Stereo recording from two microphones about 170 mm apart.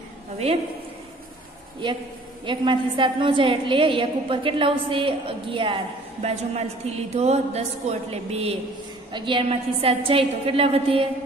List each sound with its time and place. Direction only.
2.4 s a woman's voice: 30° right (ahead or behind)